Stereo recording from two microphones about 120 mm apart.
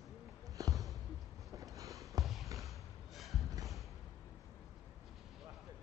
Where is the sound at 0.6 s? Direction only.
30° right (ahead or behind).